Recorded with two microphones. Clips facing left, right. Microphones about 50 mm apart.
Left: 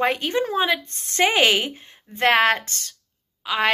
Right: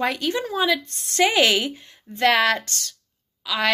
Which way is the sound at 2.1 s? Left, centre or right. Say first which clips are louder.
Left 1 dB; left.